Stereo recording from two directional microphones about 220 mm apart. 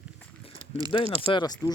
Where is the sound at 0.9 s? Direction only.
20° left (ahead or behind).